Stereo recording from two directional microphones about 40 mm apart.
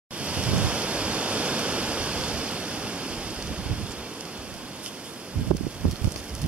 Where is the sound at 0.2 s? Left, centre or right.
Right.